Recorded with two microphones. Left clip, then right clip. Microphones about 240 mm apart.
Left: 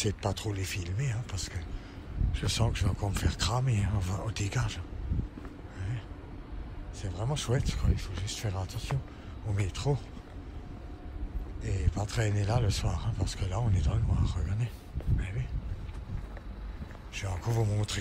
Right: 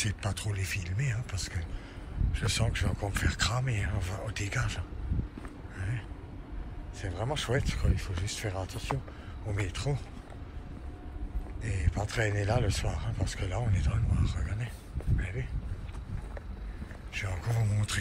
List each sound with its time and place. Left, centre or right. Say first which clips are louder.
0.0 s speech: left 3 dB; centre
7.0 s speech: right 3 dB; centre
7.8 s speech: right 1 dB; centre
8.4 s speech: right 2 dB; left
11.6 s speech: right 1 dB; centre
17.1 s speech: even; centre